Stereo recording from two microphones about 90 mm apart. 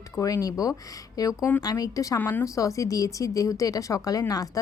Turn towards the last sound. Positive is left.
turn(degrees=45)  # may be behind; listen again after turning